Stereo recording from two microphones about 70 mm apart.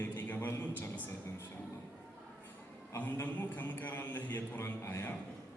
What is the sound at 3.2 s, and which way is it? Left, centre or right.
A man's voice, left.